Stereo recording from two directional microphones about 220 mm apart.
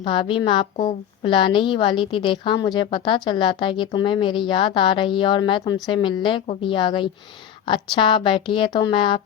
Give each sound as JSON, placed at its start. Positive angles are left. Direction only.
{"t": 0.0, "sound": "a woman's voice", "side_deg": 20}